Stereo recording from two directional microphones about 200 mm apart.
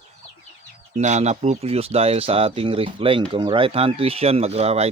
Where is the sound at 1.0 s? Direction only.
35° right (ahead or behind).